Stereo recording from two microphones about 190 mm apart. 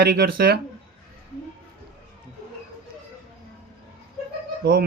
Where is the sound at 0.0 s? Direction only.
55° right (ahead or behind).